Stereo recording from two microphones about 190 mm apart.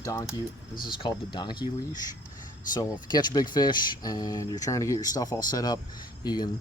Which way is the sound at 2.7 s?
20° left (ahead or behind).